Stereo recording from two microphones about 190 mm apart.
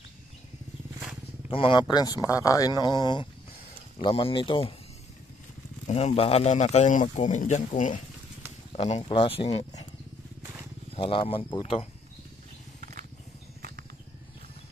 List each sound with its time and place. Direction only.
1.5 s speech: 25° left (ahead or behind)
5.9 s speech: 35° left (ahead or behind)
11.0 s speech: 30° left (ahead or behind)
13.6 s a sound: 55° right (ahead or behind)